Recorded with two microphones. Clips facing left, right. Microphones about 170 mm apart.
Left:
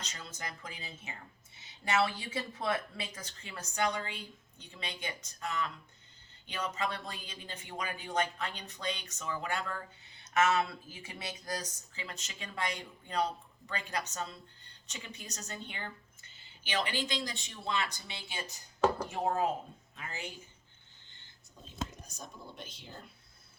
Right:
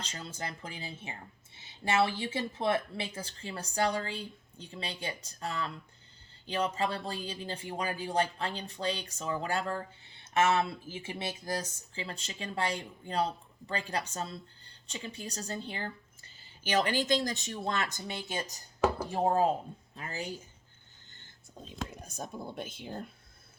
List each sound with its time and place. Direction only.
0.0 s speech: 30° right (ahead or behind)
22.0 s speech: 55° right (ahead or behind)